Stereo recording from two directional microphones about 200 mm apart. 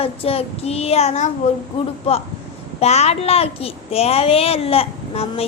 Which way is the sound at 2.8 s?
30° left (ahead or behind).